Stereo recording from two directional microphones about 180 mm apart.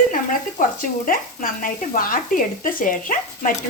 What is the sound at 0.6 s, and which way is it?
Speech, 50° left (ahead or behind).